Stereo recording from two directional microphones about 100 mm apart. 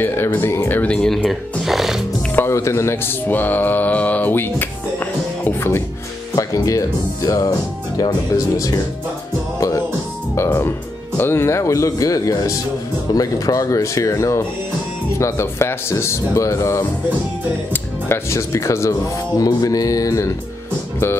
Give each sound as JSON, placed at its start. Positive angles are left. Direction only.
{"t": 0.0, "sound": "speech", "side_deg": 20}
{"t": 0.9, "sound": "speech", "side_deg": 5}
{"t": 1.2, "sound": "music", "side_deg": 0}
{"t": 2.3, "sound": "speech", "side_deg": 25}
{"t": 6.3, "sound": "speech", "side_deg": 35}
{"t": 10.3, "sound": "speech", "side_deg": 25}
{"t": 18.0, "sound": "speech", "side_deg": 25}